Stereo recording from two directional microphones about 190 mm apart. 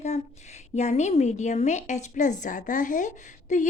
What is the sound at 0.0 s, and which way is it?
A woman's voice, 35° left (ahead or behind).